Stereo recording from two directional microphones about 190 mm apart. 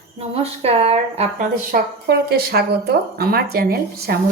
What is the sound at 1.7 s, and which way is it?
Speech, 55° right (ahead or behind).